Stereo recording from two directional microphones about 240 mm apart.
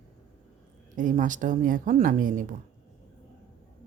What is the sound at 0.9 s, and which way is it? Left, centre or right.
Speech, right.